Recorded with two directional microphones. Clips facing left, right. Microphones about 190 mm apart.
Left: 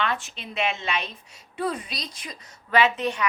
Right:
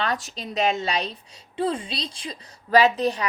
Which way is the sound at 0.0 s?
40° right (ahead or behind).